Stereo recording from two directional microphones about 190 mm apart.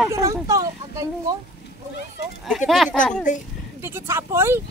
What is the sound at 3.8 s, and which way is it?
Speech, 15° right (ahead or behind).